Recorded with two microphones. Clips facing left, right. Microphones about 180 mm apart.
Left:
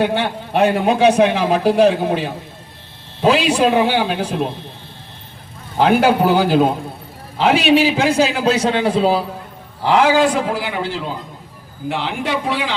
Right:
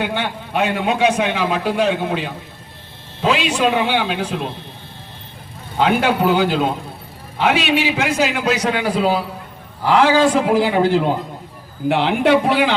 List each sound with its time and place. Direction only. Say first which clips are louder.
0.0 s a man's voice: left 4 dB; 40° left (ahead or behind)
5.7 s a man's voice: left 3 dB; 35° left (ahead or behind)
9.8 s a man's voice: even; 15° left (ahead or behind)
10.7 s speech: right 8 dB; 50° right (ahead or behind)